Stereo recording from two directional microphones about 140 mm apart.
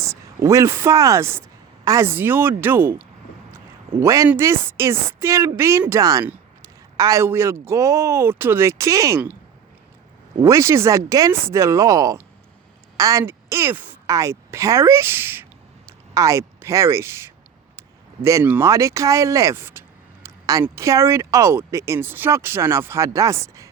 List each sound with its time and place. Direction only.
0.0 s speech: 20° right (ahead or behind)
6.2 s a sound: 10° right (ahead or behind)
6.9 s speech: 25° right (ahead or behind)
10.4 s a woman's voice: 20° right (ahead or behind)